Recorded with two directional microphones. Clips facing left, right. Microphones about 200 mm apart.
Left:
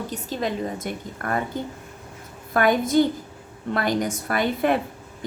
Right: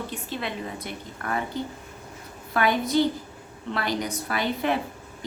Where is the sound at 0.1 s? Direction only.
40° left (ahead or behind).